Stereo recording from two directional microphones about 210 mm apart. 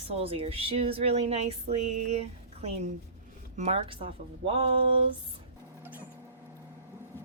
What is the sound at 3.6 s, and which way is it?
A woman's voice, 25° right (ahead or behind).